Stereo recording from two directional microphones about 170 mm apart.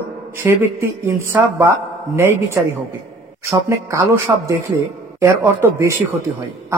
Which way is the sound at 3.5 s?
15° right (ahead or behind).